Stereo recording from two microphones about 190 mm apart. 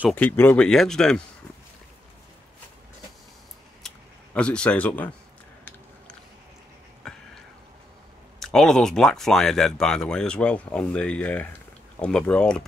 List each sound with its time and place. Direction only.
0.1 s speech: 10° left (ahead or behind)
3.8 s computer keyboard: 5° left (ahead or behind)
7.0 s a sound: 5° left (ahead or behind)
8.4 s speech: centre (ahead or behind)